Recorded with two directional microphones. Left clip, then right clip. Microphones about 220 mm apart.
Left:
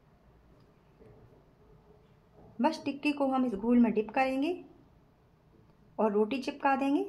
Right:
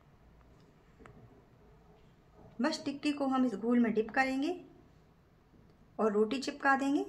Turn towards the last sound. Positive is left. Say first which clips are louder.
# left 1 dB
turn(degrees=15)  # may be behind; listen again after turning